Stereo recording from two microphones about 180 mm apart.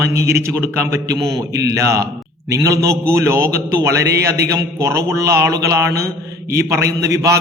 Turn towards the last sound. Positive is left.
turn(degrees=-15)  # may be behind; listen again after turning